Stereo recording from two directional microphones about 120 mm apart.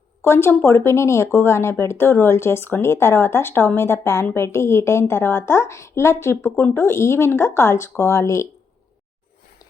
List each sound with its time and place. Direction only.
0.2 s speech: 20° left (ahead or behind)